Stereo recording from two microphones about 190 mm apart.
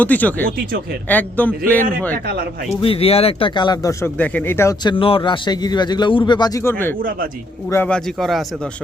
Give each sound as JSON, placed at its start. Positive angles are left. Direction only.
{"t": 0.0, "sound": "a man's voice", "side_deg": 10}
{"t": 2.1, "sound": "speech", "side_deg": -55}
{"t": 2.6, "sound": "speech", "side_deg": 30}